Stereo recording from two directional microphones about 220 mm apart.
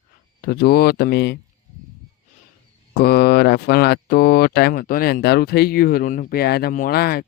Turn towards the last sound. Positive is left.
turn(degrees=45)  # may be behind; listen again after turning